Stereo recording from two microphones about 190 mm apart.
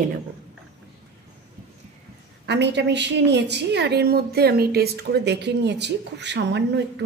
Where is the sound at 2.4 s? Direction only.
65° right (ahead or behind).